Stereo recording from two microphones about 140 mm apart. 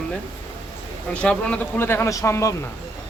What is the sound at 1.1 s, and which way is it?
Speech, 10° left (ahead or behind).